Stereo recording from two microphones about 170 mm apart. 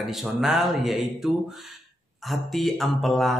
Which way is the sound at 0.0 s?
Centre (ahead or behind).